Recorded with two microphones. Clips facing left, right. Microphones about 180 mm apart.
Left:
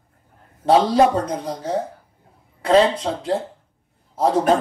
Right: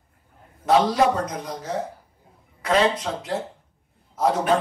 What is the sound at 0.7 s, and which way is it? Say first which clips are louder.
Speech: left 3 dB; 30° left (ahead or behind).